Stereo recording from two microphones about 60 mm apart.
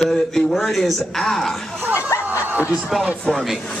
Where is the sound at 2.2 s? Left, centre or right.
Right.